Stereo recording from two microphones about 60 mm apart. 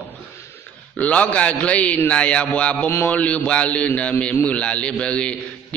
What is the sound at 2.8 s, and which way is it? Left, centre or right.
Speech, left.